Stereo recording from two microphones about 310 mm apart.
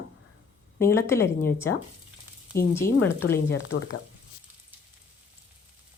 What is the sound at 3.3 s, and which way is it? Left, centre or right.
Speech, left.